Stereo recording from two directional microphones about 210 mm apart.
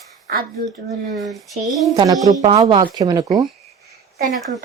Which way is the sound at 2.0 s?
15° right (ahead or behind).